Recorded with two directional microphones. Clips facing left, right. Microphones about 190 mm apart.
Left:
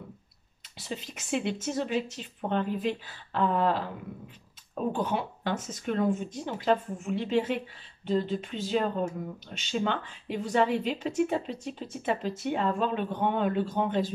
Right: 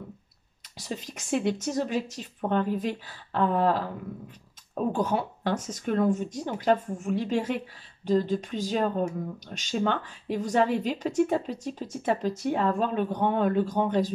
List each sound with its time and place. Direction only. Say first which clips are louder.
0.7 s speech: right 2 dB; 45° right (ahead or behind)
4.9 s a woman's voice: right 3 dB; 40° right (ahead or behind)